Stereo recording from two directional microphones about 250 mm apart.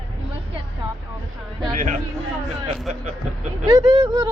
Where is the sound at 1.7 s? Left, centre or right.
Right.